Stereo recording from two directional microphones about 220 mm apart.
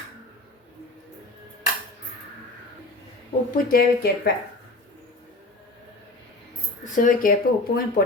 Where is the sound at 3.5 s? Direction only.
40° left (ahead or behind).